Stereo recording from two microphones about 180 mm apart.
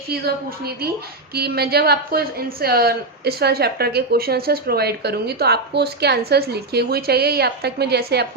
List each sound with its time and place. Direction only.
1.3 s a woman's voice: 60° right (ahead or behind)